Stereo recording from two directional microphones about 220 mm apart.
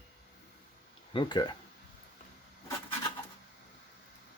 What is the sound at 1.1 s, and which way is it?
Speech, 20° left (ahead or behind).